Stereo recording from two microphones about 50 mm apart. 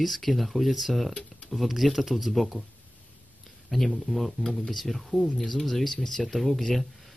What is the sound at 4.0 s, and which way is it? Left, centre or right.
Speech, centre.